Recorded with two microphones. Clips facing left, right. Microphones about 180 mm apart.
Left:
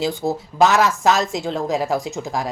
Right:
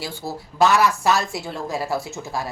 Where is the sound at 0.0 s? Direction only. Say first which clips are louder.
Left 9 dB; 20° left (ahead or behind).